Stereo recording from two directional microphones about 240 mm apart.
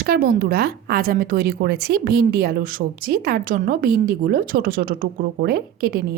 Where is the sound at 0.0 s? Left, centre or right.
Right.